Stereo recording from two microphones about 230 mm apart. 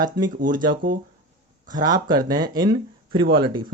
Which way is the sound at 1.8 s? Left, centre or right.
Centre.